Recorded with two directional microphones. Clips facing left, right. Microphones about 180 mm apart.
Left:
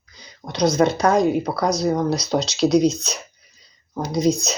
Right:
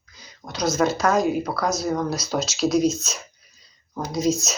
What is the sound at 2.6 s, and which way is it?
Speech, 5° right (ahead or behind).